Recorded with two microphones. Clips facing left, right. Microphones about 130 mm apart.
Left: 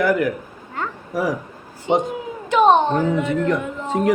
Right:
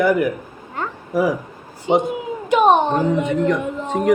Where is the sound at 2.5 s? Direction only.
15° right (ahead or behind).